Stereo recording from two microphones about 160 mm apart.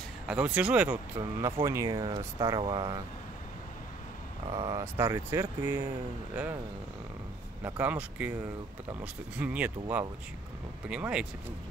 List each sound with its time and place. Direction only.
0.3 s speech: 5° right (ahead or behind); by 3.0 s 30° right (ahead or behind)
4.6 s speech: 25° right (ahead or behind)
7.6 s speech: 10° right (ahead or behind)